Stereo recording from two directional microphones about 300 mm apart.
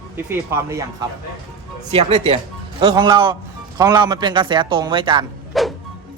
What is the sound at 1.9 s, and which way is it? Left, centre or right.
A man's voice, centre.